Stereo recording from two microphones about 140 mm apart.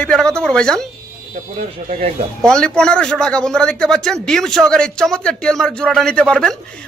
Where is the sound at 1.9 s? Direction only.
65° right (ahead or behind).